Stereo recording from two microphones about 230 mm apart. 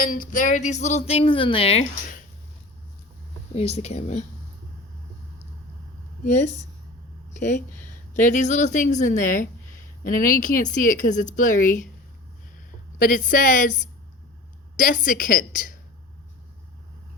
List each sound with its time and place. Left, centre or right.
0.0 s a woman's voice: left
3.5 s a woman's voice: left
6.2 s speech: left
13.0 s speech: left